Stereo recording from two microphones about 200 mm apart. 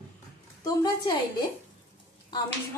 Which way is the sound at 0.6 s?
20° left (ahead or behind).